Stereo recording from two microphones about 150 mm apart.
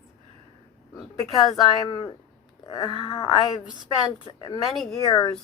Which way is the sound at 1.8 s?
25° left (ahead or behind).